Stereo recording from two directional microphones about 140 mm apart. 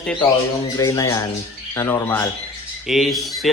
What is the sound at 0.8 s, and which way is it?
A man's voice, 20° left (ahead or behind).